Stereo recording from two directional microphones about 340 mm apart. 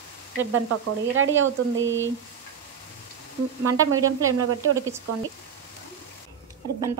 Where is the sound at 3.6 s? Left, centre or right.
Right.